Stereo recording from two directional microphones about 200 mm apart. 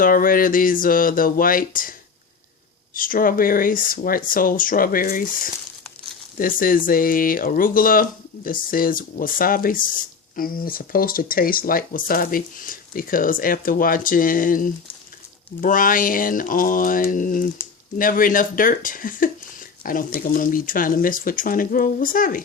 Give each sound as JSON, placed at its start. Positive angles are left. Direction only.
{"t": 0.0, "sound": "speech", "side_deg": 45}